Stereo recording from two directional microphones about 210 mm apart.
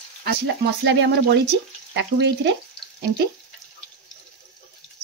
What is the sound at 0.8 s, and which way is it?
Speech, 55° right (ahead or behind).